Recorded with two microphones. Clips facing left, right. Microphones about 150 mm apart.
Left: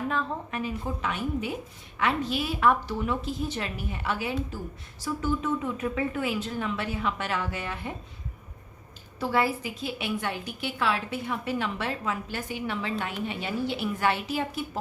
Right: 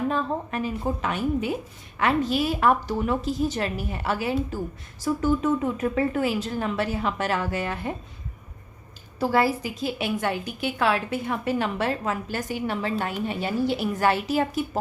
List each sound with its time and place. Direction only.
0.1 s speech: 35° right (ahead or behind)
9.1 s a woman's voice: 40° right (ahead or behind)